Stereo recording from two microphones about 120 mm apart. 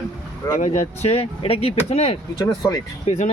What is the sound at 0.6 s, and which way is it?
Speech, 85° left.